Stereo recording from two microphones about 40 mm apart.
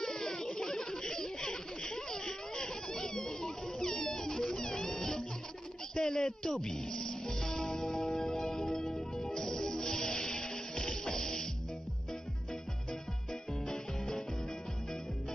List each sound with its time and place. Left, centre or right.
0.0 s a sound: centre
3.9 s music: centre
5.9 s speech: centre
9.3 s music: centre
13.7 s music: centre